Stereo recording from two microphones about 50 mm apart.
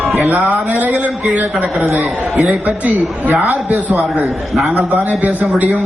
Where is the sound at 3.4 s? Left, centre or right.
Left.